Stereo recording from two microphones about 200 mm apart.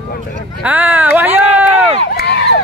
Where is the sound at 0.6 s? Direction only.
10° right (ahead or behind).